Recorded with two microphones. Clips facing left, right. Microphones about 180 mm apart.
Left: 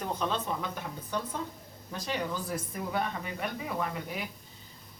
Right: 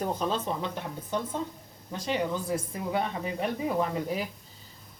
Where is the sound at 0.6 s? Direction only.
25° right (ahead or behind).